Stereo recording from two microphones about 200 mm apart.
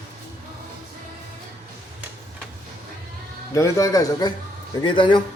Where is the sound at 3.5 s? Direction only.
15° left (ahead or behind).